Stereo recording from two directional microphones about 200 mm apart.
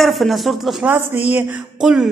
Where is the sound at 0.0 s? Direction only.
Centre (ahead or behind).